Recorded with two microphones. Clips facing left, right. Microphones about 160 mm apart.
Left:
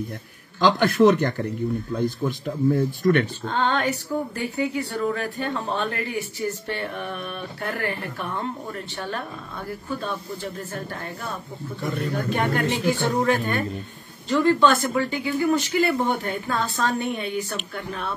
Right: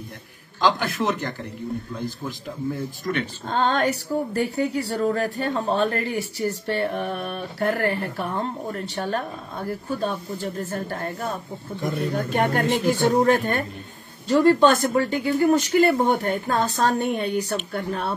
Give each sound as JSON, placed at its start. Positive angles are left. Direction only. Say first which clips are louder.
{"t": 0.6, "sound": "a man's voice", "louder": "left 5 dB", "side_deg": 50}
{"t": 3.4, "sound": "speech", "louder": "right 2 dB", "side_deg": -40}